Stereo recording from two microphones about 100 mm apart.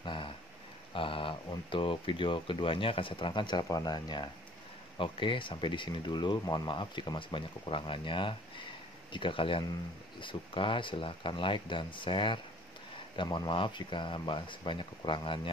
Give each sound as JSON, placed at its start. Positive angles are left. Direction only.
{"t": 0.0, "sound": "a sound", "side_deg": 55}
{"t": 1.7, "sound": "speech", "side_deg": 60}
{"t": 3.6, "sound": "speech", "side_deg": 40}
{"t": 4.9, "sound": "speech", "side_deg": 55}